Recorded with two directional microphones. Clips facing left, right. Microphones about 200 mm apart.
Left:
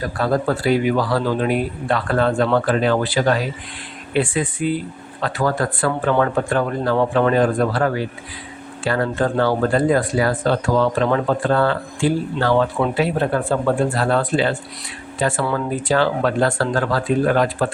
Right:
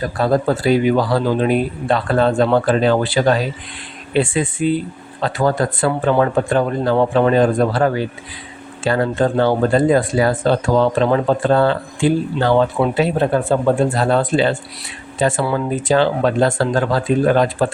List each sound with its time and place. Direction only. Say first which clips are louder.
0.2 s speech: right 3 dB; 25° right (ahead or behind)